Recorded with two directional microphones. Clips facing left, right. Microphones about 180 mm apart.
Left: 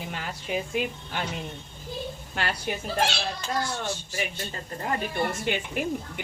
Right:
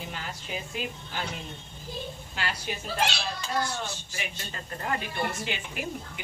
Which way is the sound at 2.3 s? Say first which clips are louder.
Left 4 dB; 55° left (ahead or behind).